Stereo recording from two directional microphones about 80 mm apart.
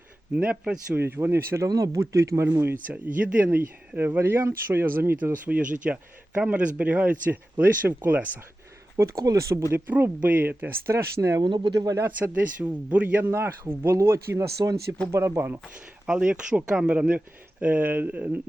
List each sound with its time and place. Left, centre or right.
0.3 s speech: centre
0.9 s speech: right
1.6 s speech: right
2.8 s speech: centre
5.1 s speech: centre
9.2 s speech: right
9.7 s speech: right
10.9 s speech: right
11.4 s speech: right
11.9 s speech: right
15.6 s speech: centre